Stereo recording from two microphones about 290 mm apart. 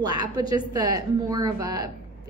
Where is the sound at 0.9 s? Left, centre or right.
Centre.